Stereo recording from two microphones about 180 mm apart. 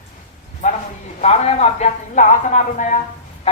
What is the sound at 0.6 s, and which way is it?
A man's voice, 40° left (ahead or behind).